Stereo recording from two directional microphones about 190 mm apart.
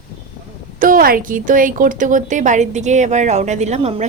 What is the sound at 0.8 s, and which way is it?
A woman's voice, 50° right (ahead or behind).